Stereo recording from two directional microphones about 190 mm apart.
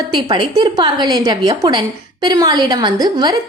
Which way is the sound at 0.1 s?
25° right (ahead or behind).